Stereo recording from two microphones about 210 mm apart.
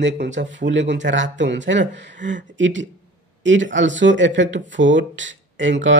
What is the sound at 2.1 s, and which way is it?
Speech, 35° right (ahead or behind).